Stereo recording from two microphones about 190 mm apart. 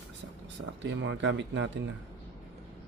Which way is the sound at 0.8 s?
75° right (ahead or behind).